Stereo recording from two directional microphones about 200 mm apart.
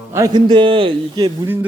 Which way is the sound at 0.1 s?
20° right (ahead or behind).